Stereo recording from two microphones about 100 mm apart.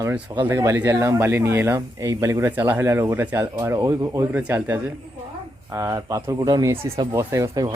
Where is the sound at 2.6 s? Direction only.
20° right (ahead or behind).